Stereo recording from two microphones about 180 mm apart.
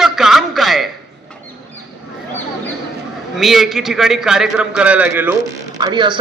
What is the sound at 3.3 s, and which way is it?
A man's voice, centre (ahead or behind).